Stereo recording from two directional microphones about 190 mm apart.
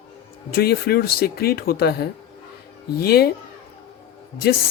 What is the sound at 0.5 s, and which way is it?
Speech, 55° left (ahead or behind).